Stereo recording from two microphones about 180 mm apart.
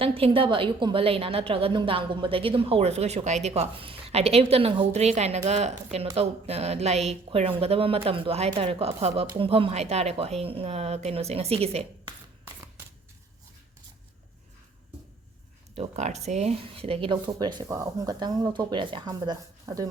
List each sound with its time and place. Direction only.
0.0 s a woman's voice: 30° right (ahead or behind)
15.7 s speech: 35° right (ahead or behind); by 19.9 s 20° right (ahead or behind)